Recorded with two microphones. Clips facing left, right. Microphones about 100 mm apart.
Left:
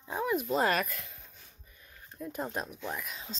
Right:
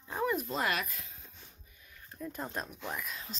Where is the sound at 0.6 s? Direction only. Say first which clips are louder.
Left 4 dB; 50° left (ahead or behind).